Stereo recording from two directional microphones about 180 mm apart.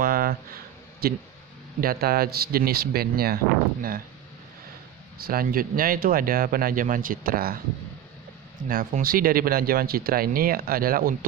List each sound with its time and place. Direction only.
0.0 s a sound: 55° right (ahead or behind)
1.0 s speech: 60° right (ahead or behind)
5.1 s speech: 55° right (ahead or behind)
8.6 s speech: 45° right (ahead or behind)